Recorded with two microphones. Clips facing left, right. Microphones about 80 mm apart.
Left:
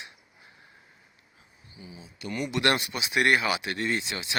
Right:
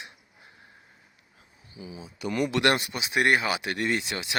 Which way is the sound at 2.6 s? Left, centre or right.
Right.